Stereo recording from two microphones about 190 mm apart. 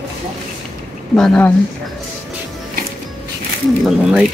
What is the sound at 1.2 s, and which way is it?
Speech, 5° left (ahead or behind).